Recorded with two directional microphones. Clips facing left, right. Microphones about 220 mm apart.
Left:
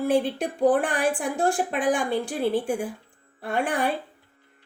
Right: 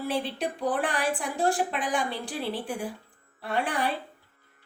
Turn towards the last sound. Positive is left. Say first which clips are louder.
# left 3 dB
turn(degrees=50)  # may be behind; listen again after turning